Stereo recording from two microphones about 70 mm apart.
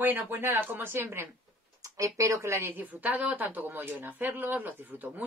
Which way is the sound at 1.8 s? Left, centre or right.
Right.